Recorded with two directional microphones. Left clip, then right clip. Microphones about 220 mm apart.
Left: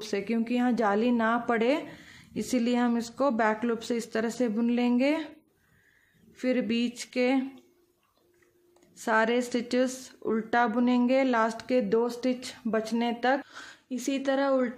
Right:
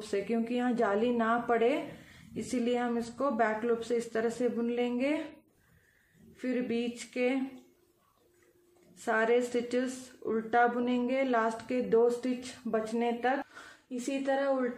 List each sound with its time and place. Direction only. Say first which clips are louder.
0.1 s a woman's voice: left 2 dB; 40° left (ahead or behind)
6.3 s speech: left 5 dB; 45° left (ahead or behind)
9.0 s speech: left 2 dB; 45° left (ahead or behind)